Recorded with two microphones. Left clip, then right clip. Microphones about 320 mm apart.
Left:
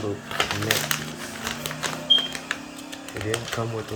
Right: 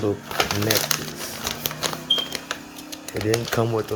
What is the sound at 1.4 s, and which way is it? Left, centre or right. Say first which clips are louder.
Music: right 2 dB; right.